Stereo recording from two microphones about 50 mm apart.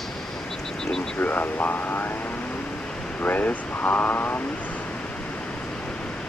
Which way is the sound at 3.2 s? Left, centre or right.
Left.